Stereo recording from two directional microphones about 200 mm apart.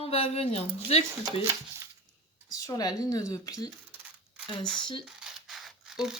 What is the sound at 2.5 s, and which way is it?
Speech, 20° left (ahead or behind).